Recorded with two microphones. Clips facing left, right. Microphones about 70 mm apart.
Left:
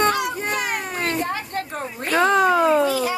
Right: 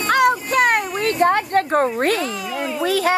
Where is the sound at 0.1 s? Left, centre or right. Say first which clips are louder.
Right 7 dB; right.